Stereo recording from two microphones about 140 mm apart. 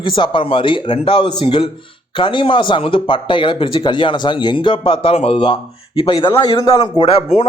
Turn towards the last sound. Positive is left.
turn(degrees=45)  # may be behind; listen again after turning